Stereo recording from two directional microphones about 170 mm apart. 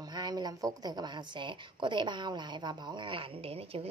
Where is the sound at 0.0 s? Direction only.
25° right (ahead or behind).